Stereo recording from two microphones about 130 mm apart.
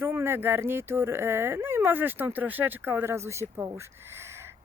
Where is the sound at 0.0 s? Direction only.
20° right (ahead or behind).